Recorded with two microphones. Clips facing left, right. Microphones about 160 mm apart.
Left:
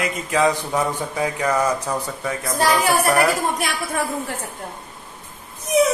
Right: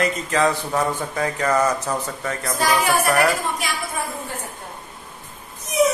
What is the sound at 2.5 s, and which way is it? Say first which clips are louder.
Speech: left 2 dB; 30° left (ahead or behind).